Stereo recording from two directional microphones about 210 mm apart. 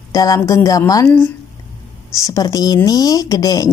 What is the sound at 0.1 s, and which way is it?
Speech, 15° left (ahead or behind).